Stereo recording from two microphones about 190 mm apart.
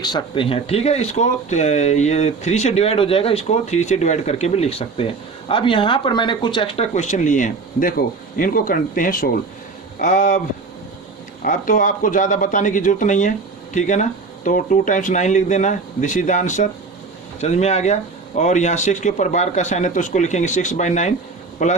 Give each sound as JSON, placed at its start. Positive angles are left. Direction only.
{"t": 0.0, "sound": "speech", "side_deg": 20}
{"t": 11.4, "sound": "speech", "side_deg": 45}